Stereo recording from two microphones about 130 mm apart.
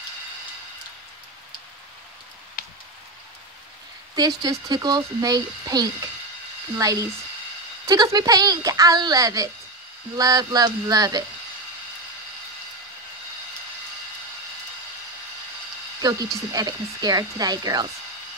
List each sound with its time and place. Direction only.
2.6 s a sound: 90° left
4.1 s speech: 30° right (ahead or behind)
16.0 s speech: 30° right (ahead or behind)